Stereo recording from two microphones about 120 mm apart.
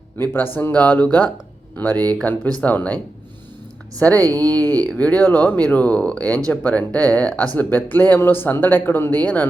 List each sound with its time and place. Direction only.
0.2 s speech: 20° left (ahead or behind)
4.0 s speech: 15° left (ahead or behind)